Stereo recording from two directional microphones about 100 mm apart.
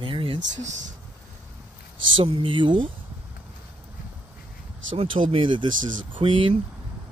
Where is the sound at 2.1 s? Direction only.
65° right (ahead or behind).